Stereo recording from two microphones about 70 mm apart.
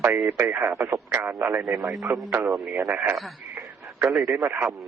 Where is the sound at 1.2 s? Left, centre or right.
Right.